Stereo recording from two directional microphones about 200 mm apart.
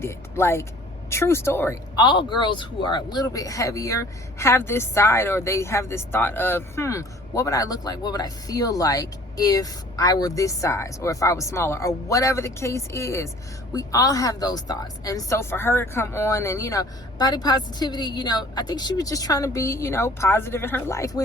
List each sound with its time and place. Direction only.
0.0 s speech: 15° left (ahead or behind)
2.0 s speech: 25° left (ahead or behind)